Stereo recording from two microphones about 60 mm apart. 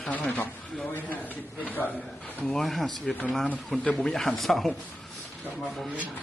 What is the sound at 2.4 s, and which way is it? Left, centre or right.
Speech, centre.